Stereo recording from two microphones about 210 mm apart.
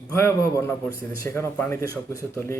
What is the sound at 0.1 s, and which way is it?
Speech, 15° left (ahead or behind).